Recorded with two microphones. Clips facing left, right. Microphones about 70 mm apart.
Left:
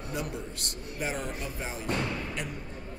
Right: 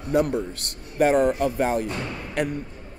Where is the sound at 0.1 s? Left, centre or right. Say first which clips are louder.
Right 14 dB; right.